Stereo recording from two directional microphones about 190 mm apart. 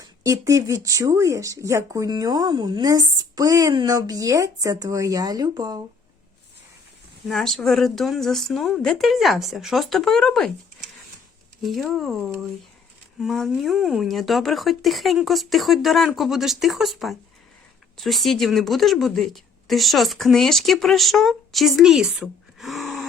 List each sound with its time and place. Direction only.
0.0 s speech: 15° right (ahead or behind)
7.3 s speech: centre (ahead or behind)
11.6 s speech: centre (ahead or behind)